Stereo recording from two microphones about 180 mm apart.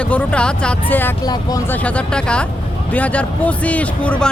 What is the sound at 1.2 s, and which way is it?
Speech, 20° left (ahead or behind).